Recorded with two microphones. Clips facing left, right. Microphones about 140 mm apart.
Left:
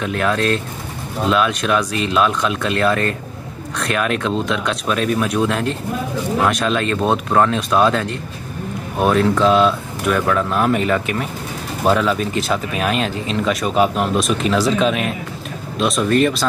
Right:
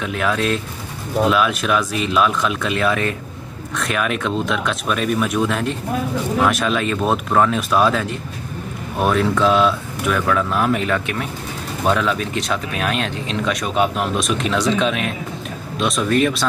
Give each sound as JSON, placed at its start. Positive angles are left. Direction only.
{"t": 0.0, "sound": "speech", "side_deg": 0}